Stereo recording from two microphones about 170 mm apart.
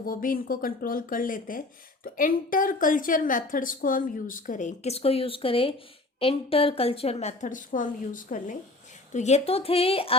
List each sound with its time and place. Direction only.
0.0 s a woman's voice: 55° left (ahead or behind)
9.1 s a woman's voice: 40° left (ahead or behind)